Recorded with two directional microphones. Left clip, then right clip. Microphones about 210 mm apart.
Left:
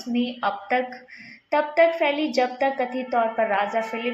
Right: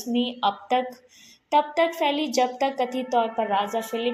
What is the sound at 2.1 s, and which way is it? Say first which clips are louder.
Speech: left 1 dB; centre (ahead or behind).